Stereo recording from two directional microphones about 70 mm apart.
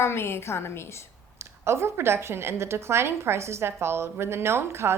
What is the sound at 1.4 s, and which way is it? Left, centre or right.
A woman's voice, right.